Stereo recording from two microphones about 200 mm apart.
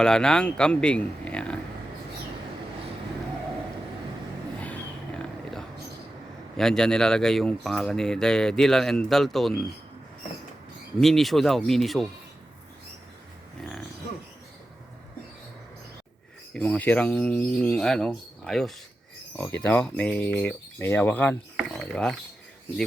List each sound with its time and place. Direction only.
0.0 s speech: 5° left (ahead or behind)
4.6 s a sound: 5° left (ahead or behind)
6.6 s speech: 5° left (ahead or behind)
11.0 s speech: centre (ahead or behind)
16.6 s speech: 5° left (ahead or behind)